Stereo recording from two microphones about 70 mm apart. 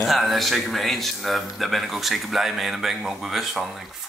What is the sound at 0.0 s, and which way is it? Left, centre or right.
Speech, centre.